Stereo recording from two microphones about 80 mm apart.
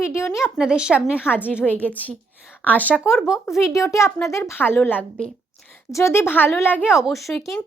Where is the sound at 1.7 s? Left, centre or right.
Centre.